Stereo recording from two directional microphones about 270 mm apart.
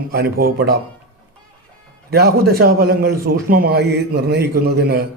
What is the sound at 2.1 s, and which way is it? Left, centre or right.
Speech, right.